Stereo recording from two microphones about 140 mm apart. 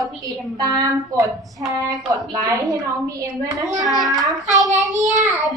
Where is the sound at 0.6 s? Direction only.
25° right (ahead or behind).